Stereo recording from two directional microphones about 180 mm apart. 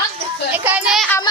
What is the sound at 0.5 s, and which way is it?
Speech, 10° right (ahead or behind).